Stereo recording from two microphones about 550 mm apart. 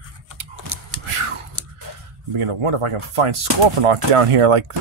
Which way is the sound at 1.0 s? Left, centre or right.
Right.